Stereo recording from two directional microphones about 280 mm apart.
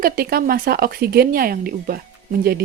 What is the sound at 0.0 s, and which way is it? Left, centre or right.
Speech, right.